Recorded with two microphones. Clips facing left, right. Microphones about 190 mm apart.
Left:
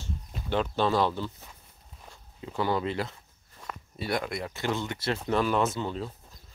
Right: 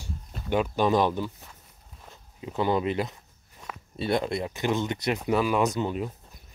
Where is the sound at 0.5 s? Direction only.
15° right (ahead or behind).